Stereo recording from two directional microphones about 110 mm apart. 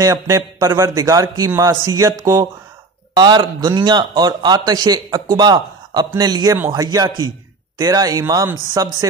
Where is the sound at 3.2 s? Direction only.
40° right (ahead or behind).